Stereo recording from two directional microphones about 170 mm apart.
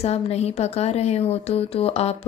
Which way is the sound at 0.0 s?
40° left (ahead or behind).